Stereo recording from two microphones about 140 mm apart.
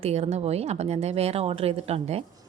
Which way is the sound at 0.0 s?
50° right (ahead or behind).